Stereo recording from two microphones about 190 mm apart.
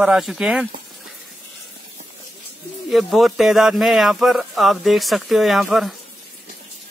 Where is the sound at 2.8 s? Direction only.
Centre (ahead or behind).